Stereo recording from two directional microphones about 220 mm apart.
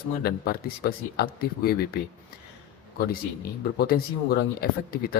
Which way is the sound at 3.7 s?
45° left (ahead or behind).